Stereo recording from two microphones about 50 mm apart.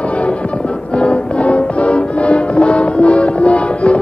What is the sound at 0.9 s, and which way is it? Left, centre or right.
Music, left.